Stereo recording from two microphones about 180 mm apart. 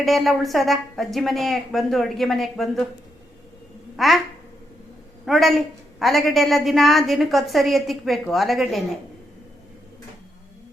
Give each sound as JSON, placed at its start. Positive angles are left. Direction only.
{"t": 0.0, "sound": "a woman's voice", "side_deg": 0}
{"t": 3.9, "sound": "a child's voice", "side_deg": 0}
{"t": 5.2, "sound": "a woman's voice", "side_deg": 0}